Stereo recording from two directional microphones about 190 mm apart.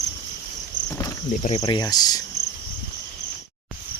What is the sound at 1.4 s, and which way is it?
Speech, 30° left (ahead or behind).